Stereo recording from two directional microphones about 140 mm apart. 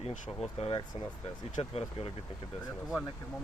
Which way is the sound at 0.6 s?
50° left (ahead or behind).